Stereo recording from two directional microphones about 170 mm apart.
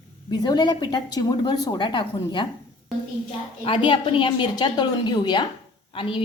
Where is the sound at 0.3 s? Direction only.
25° left (ahead or behind).